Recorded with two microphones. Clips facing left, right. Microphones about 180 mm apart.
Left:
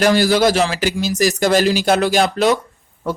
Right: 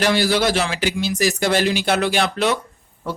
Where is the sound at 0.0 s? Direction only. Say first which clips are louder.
Left 4 dB; 40° left (ahead or behind).